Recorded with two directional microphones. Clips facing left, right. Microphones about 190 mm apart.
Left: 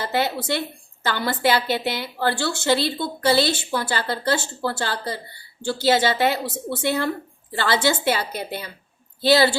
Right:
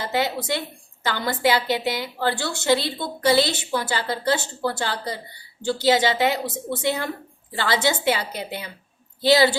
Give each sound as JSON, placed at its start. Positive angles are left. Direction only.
{"t": 0.0, "sound": "a woman's voice", "side_deg": -15}